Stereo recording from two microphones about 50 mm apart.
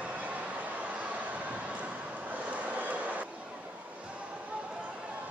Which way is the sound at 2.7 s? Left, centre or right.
Right.